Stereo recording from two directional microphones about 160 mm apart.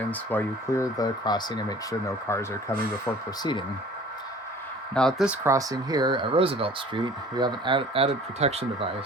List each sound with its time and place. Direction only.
0.1 s speech: 10° left (ahead or behind)
4.9 s speech: centre (ahead or behind); by 8.9 s 40° right (ahead or behind)